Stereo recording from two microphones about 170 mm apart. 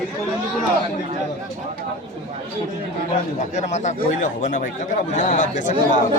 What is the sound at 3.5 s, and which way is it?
Speech, 40° left (ahead or behind).